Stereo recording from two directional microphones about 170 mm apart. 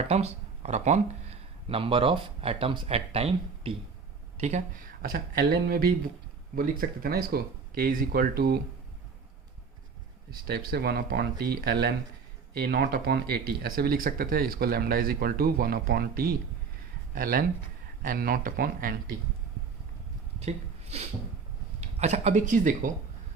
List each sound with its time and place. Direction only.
0.0 s speech: 40° right (ahead or behind); by 8.6 s 65° right (ahead or behind)
10.7 s speech: 70° right (ahead or behind)
20.4 s speech: 40° right (ahead or behind)